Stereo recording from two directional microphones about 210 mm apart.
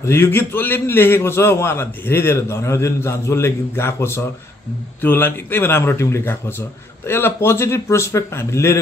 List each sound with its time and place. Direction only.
0.0 s a man's voice: 10° left (ahead or behind)